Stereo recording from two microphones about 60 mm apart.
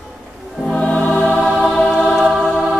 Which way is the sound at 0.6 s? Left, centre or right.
Centre.